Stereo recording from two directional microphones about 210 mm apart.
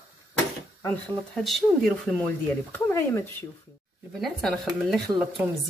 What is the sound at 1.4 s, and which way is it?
Speech, centre (ahead or behind).